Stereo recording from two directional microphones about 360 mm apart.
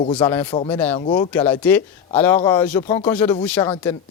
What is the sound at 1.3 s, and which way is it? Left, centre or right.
Speech, centre.